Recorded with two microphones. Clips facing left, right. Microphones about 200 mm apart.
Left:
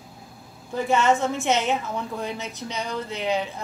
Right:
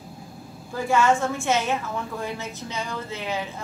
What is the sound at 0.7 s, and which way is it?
A woman's voice, 20° left (ahead or behind).